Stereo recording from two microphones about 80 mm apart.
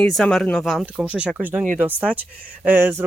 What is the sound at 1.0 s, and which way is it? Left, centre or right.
Speech, centre.